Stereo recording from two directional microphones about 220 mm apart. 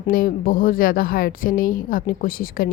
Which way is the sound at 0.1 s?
40° left (ahead or behind).